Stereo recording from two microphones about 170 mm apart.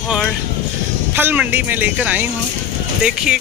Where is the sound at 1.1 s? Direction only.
10° right (ahead or behind).